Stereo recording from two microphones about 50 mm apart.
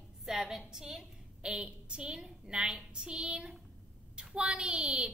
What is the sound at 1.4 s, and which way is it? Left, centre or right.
A woman's voice, centre.